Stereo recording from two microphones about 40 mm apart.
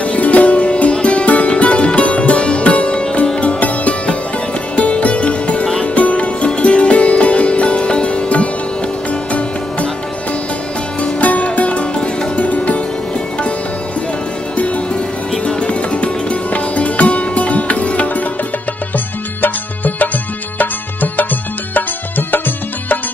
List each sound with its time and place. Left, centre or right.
0.0 s music: left
11.0 s music: left
12.4 s music: left
15.4 s music: left
19.4 s music: left